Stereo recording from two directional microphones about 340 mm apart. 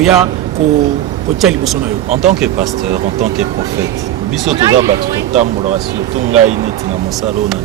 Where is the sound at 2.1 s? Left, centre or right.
Centre.